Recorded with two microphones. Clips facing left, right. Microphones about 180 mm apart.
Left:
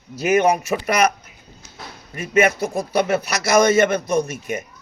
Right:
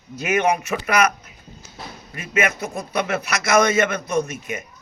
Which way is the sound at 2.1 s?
40° left (ahead or behind).